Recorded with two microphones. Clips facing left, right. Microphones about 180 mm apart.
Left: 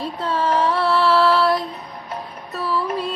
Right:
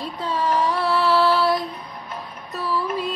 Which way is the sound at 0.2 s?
Centre (ahead or behind).